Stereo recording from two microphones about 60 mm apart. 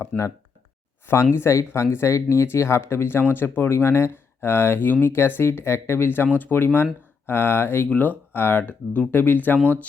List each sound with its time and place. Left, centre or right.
0.1 s speech: left
1.0 s speech: left
7.9 s speech: left